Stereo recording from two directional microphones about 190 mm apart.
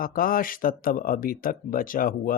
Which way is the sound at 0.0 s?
50° left (ahead or behind).